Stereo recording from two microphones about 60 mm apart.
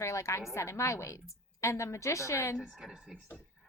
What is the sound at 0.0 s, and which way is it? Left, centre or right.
A woman's voice, left.